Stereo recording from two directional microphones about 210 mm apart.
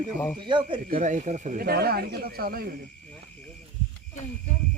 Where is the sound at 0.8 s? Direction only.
40° right (ahead or behind).